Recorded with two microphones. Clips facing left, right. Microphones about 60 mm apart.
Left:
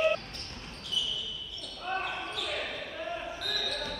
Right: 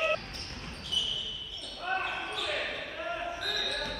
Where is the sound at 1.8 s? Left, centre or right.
Centre.